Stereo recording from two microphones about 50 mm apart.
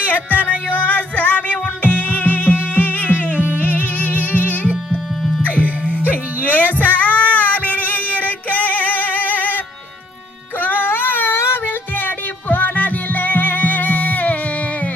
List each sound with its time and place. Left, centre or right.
0.0 s music: left
5.4 s music: left
7.3 s a sound: left
8.1 s female singing: left
10.6 s a sound: left
11.3 s music: left